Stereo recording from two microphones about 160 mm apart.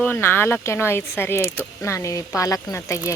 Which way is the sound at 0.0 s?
15° left (ahead or behind).